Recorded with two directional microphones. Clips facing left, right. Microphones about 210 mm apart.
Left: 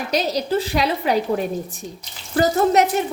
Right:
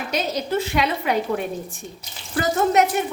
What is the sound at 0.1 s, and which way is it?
A woman's voice, 35° left (ahead or behind).